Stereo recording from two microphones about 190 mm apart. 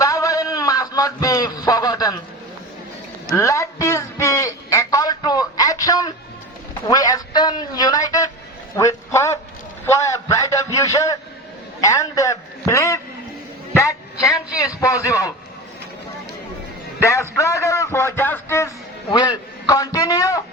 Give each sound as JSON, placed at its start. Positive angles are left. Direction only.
{"t": 0.0, "sound": "a sound", "side_deg": 15}
{"t": 3.2, "sound": "a man's voice", "side_deg": 15}
{"t": 17.0, "sound": "a man's voice", "side_deg": 15}